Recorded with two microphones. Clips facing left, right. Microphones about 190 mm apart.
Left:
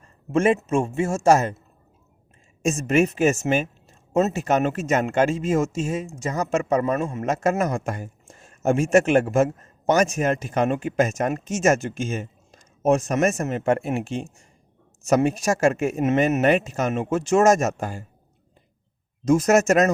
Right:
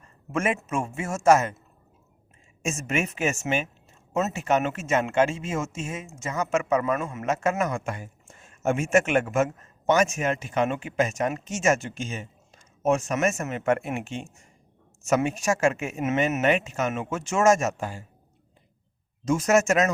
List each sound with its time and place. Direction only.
0.3 s speech: 30° left (ahead or behind)
2.6 s speech: 35° left (ahead or behind)
19.2 s speech: 40° left (ahead or behind)